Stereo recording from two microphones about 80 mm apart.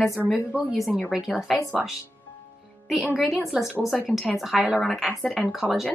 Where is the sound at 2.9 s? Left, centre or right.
Centre.